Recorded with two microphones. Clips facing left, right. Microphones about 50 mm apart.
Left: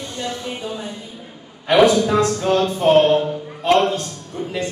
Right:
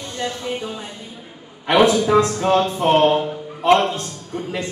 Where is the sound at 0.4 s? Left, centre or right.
Centre.